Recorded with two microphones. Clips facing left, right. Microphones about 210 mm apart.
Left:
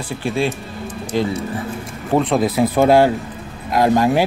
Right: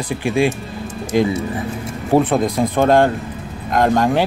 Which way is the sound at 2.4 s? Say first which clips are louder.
Left 1 dB; 5° left (ahead or behind).